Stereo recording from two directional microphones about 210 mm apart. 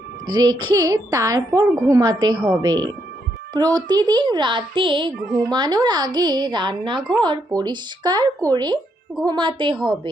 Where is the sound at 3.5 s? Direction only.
20° right (ahead or behind).